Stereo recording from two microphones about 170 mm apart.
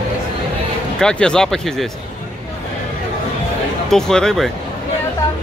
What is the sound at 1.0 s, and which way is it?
Speech, 5° left (ahead or behind).